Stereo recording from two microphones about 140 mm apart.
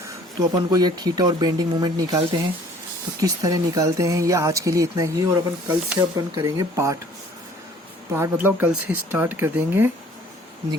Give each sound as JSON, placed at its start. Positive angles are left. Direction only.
{"t": 0.3, "sound": "speech", "side_deg": -30}
{"t": 8.1, "sound": "speech", "side_deg": -15}